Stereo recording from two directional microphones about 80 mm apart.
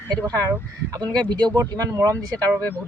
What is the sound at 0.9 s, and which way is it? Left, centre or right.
Speech, right.